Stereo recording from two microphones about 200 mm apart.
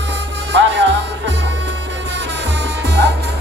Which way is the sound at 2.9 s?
60° right (ahead or behind).